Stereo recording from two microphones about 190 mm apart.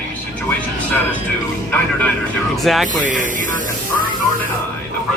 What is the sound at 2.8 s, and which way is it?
Speech, 45° right (ahead or behind).